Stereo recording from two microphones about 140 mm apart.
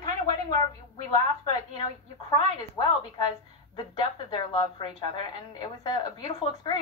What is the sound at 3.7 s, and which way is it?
A woman's voice, 35° left (ahead or behind).